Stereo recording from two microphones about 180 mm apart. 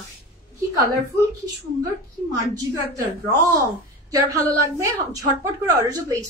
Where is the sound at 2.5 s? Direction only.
20° right (ahead or behind).